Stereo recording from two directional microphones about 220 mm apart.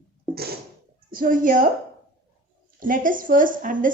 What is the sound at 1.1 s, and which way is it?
Speech, 40° right (ahead or behind).